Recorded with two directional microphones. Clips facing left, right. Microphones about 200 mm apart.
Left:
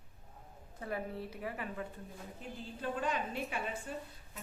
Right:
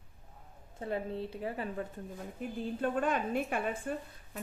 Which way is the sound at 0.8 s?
25° right (ahead or behind).